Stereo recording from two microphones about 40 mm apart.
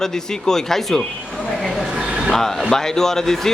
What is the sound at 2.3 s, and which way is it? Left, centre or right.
A man's voice, centre.